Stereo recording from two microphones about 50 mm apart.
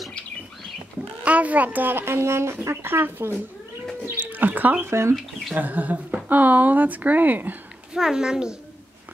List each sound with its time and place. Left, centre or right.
1.2 s speech: right
4.2 s bird: right
4.8 s speech: right
5.5 s speech: right
7.9 s a woman's voice: centre